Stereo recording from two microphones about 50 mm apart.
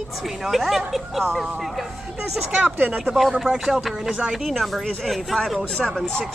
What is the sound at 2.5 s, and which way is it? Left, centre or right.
Speech, right.